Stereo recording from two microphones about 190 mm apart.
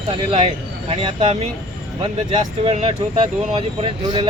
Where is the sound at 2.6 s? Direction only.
30° right (ahead or behind).